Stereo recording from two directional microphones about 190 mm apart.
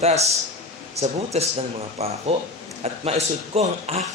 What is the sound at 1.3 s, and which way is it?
A man's voice, 35° right (ahead or behind).